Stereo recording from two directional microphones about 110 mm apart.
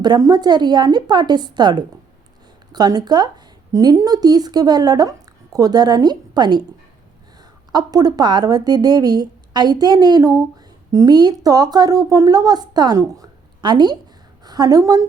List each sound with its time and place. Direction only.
0.0 s a woman's voice: 40° right (ahead or behind)
7.7 s a woman's voice: 35° right (ahead or behind)